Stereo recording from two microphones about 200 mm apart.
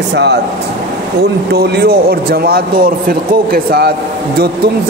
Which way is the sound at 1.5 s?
55° right (ahead or behind).